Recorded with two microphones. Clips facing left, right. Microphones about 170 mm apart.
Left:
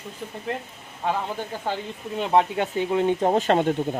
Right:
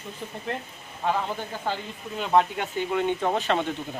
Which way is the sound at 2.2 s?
20° left (ahead or behind).